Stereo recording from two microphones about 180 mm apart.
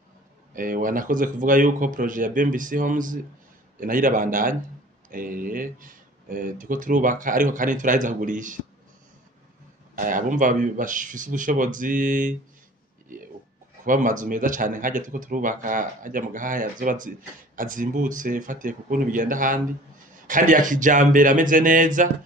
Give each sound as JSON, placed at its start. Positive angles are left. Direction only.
{"t": 0.6, "sound": "speech", "side_deg": -50}
{"t": 9.9, "sound": "speech", "side_deg": -45}
{"t": 13.8, "sound": "speech", "side_deg": -45}